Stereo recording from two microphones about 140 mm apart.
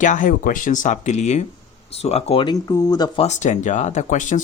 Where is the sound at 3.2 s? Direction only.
55° left (ahead or behind).